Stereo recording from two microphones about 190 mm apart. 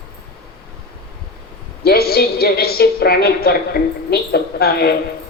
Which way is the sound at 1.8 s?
55° left (ahead or behind).